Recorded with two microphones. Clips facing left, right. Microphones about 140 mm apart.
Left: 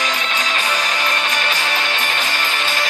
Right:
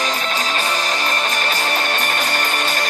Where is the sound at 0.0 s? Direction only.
40° right (ahead or behind).